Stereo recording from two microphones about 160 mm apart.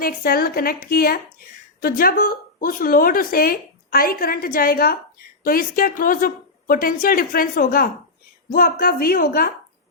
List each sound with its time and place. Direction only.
0.0 s speech: 65° left (ahead or behind)